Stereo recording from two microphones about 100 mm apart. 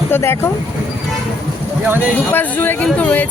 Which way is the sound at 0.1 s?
25° left (ahead or behind).